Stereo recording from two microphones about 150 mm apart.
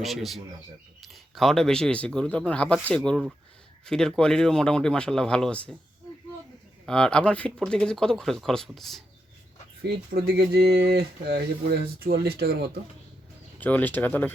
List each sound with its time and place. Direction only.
0.0 s speech: centre (ahead or behind)
6.8 s speech: 5° left (ahead or behind)
9.8 s speech: 85° right
13.6 s speech: 10° left (ahead or behind)